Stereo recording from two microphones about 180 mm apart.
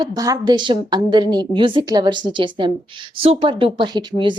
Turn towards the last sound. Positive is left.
turn(degrees=-25)  # may be behind; listen again after turning